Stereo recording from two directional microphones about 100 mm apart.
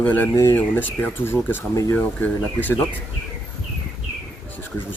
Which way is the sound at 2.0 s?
15° left (ahead or behind).